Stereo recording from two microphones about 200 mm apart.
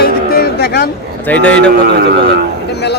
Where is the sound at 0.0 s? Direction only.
50° left (ahead or behind).